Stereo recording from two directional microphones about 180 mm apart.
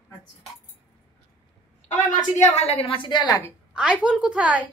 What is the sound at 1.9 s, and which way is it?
Speech, 45° left (ahead or behind).